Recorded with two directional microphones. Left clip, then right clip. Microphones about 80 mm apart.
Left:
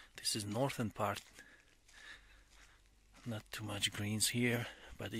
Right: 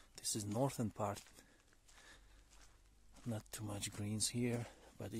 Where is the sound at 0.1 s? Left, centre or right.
Right.